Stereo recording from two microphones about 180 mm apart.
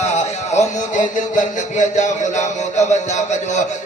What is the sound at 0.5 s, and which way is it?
Speech, 45° left (ahead or behind).